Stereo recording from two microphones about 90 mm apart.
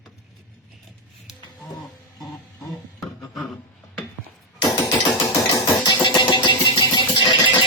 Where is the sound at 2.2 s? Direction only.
Centre (ahead or behind).